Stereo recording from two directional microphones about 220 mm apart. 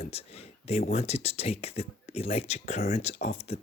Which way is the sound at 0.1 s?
25° left (ahead or behind).